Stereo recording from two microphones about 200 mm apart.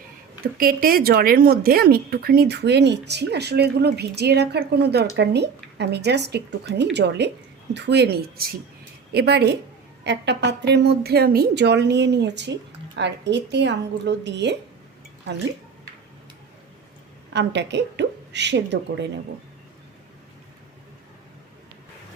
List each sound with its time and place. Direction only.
0.4 s speech: 45° right (ahead or behind)
17.3 s a woman's voice: 60° right (ahead or behind)